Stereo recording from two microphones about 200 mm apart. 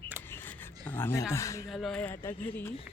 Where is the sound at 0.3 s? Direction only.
10° left (ahead or behind).